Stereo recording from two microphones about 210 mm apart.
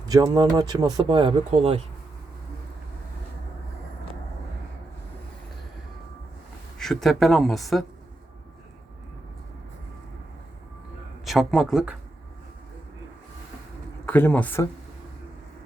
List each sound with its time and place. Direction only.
0.1 s speech: 20° right (ahead or behind)
6.7 s speech: centre (ahead or behind)
11.3 s speech: centre (ahead or behind)
14.0 s speech: 10° left (ahead or behind)